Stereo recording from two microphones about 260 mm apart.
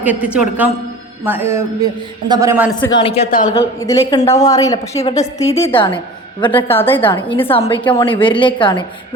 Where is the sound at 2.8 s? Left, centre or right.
Centre.